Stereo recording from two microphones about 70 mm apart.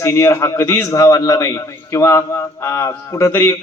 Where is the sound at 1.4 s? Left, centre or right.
Left.